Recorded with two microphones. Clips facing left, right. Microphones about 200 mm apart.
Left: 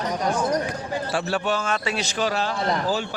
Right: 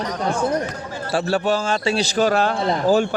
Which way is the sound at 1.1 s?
35° right (ahead or behind).